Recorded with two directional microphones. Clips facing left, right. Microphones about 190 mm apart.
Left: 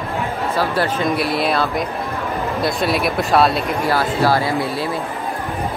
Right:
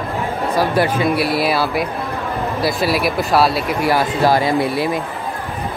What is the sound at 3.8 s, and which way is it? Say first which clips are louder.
Speech: right 2 dB; 15° right (ahead or behind).